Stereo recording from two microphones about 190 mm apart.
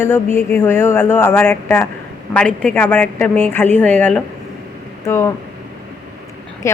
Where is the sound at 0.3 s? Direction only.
10° left (ahead or behind).